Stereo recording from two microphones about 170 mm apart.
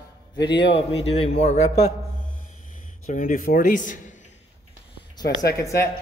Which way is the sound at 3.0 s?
45° left (ahead or behind).